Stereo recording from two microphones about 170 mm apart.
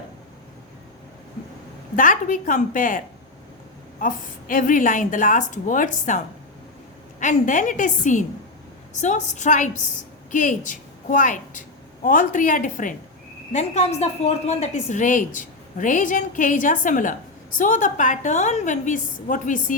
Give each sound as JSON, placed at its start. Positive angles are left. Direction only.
{"t": 2.0, "sound": "a woman's voice", "side_deg": 50}
{"t": 4.0, "sound": "a woman's voice", "side_deg": 55}